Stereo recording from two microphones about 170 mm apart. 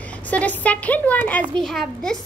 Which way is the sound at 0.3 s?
10° left (ahead or behind).